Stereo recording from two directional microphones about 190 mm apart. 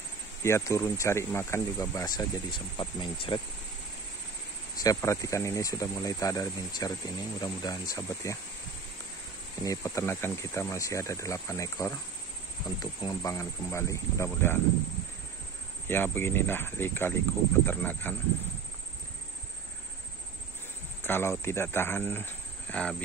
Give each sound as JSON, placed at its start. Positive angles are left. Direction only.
{"t": 0.4, "sound": "speech", "side_deg": 15}
{"t": 4.8, "sound": "speech", "side_deg": 15}
{"t": 9.6, "sound": "speech", "side_deg": 15}
{"t": 13.0, "sound": "speech", "side_deg": 15}
{"t": 15.9, "sound": "speech", "side_deg": 10}
{"t": 21.0, "sound": "speech", "side_deg": 10}